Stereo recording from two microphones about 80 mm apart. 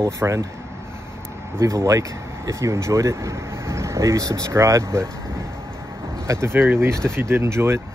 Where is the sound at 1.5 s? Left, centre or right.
Right.